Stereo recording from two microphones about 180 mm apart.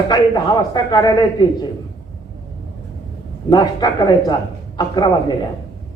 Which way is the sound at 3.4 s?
20° left (ahead or behind).